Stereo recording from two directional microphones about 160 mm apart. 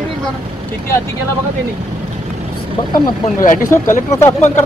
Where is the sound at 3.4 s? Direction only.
60° left (ahead or behind).